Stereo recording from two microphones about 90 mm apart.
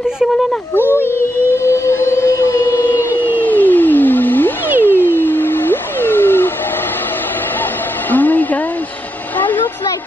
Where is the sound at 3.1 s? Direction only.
20° left (ahead or behind).